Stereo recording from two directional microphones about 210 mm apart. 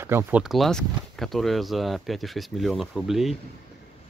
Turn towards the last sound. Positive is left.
turn(degrees=0)  # may be behind; listen again after turning